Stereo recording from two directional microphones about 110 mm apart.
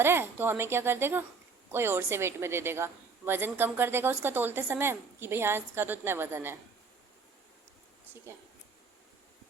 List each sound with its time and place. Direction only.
0.0 s a woman's voice: 20° right (ahead or behind)